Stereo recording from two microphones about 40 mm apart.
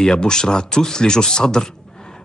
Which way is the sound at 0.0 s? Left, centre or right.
Centre.